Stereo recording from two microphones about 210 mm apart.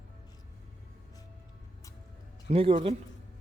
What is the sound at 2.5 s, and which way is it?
Speech, 25° right (ahead or behind).